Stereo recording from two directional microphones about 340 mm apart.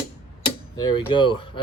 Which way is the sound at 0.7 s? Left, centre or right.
Centre.